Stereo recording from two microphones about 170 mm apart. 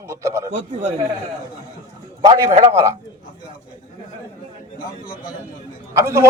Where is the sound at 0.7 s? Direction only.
40° right (ahead or behind).